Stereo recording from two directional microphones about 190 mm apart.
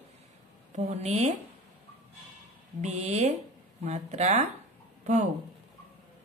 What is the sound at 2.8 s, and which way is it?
A woman's voice, 35° right (ahead or behind).